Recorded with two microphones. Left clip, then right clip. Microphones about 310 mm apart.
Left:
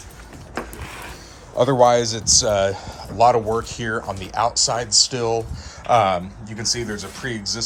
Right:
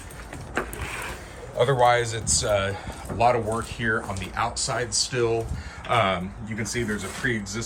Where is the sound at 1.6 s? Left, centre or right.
Centre.